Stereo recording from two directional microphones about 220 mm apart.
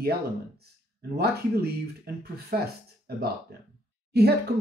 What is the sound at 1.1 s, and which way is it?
Speech, 45° right (ahead or behind).